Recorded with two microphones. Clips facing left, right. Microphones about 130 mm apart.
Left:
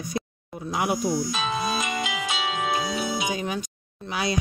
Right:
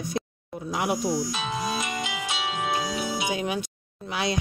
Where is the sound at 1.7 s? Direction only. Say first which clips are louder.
Left 2 dB; 90° left.